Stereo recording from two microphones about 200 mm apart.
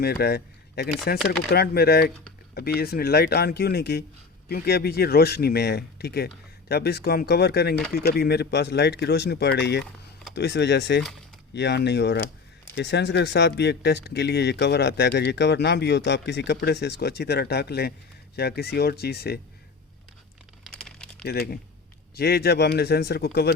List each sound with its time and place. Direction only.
0.0 s speech: 50° left (ahead or behind)
20.7 s crumpling: 5° left (ahead or behind)
21.2 s speech: 50° left (ahead or behind)